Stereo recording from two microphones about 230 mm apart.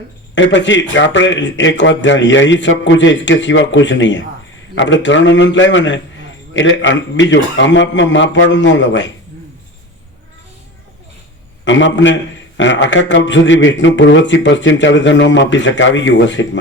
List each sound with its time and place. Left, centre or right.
0.3 s a man's voice: left
11.6 s a man's voice: left